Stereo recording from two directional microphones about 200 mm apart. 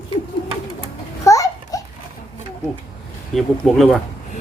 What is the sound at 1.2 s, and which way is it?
Babbling, 15° left (ahead or behind).